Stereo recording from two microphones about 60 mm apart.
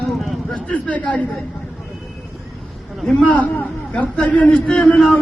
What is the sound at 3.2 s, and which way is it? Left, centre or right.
A man's voice, left.